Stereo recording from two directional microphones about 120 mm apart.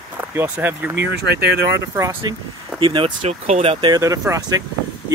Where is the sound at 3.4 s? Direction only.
60° right (ahead or behind).